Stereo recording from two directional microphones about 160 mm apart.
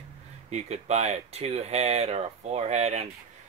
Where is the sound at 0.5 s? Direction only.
45° right (ahead or behind).